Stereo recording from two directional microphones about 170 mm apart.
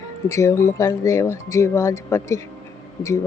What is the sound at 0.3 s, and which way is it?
A woman's voice, 15° left (ahead or behind).